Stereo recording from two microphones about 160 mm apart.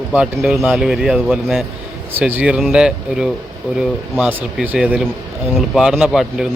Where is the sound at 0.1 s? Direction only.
5° right (ahead or behind).